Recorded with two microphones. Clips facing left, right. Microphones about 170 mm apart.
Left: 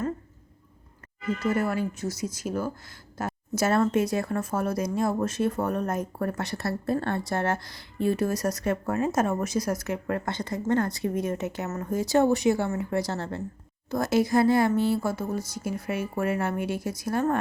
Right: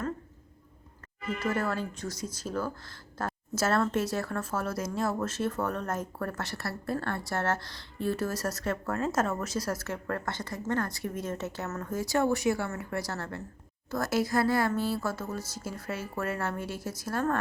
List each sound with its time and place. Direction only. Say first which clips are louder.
1.5 s speech: left 4 dB; 10° left (ahead or behind)